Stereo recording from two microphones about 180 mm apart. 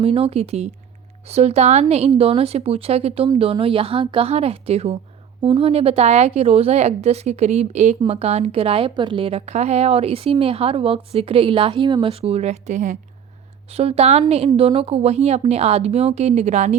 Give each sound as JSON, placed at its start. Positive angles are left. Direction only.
{"t": 0.0, "sound": "a woman's voice", "side_deg": -35}